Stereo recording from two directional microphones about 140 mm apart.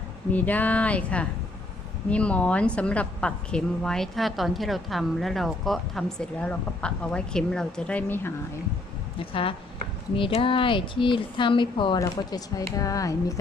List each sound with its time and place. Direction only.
0.3 s a woman's voice: 10° left (ahead or behind)
9.1 s speech: 40° left (ahead or behind)
11.9 s speech: 25° left (ahead or behind)